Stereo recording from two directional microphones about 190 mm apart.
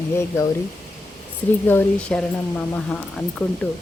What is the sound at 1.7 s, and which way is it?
Speech, 10° left (ahead or behind).